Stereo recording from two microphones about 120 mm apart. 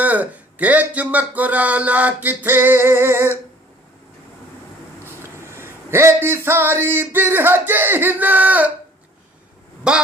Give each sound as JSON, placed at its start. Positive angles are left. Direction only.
{"t": 0.0, "sound": "speech", "side_deg": -10}
{"t": 5.4, "sound": "speech", "side_deg": -20}
{"t": 9.9, "sound": "speech", "side_deg": -5}